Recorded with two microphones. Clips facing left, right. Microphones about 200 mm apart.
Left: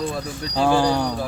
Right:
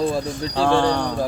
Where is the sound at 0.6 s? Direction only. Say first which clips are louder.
Even; 5° left (ahead or behind).